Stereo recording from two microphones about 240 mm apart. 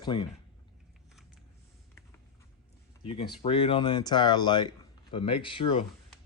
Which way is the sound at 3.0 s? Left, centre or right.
Left.